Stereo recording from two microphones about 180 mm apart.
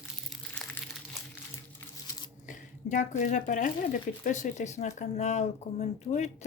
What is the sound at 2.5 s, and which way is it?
Speech, 45° left (ahead or behind).